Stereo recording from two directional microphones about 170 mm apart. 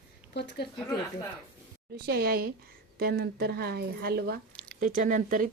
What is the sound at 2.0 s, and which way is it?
Speech, 65° right (ahead or behind).